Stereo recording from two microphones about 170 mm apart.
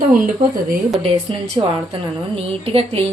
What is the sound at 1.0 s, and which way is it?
A woman's voice, 35° right (ahead or behind).